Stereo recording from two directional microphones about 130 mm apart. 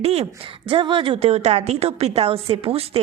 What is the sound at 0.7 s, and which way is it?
Speech, 40° right (ahead or behind).